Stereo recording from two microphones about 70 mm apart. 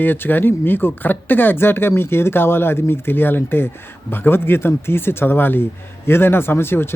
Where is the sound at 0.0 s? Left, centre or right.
Left.